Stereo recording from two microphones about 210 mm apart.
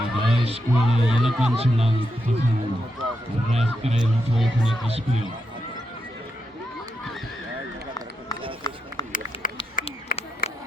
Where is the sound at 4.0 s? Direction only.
Centre (ahead or behind).